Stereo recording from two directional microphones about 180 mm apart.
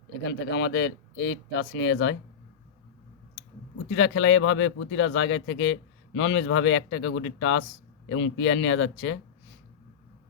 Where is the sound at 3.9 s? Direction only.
90° left.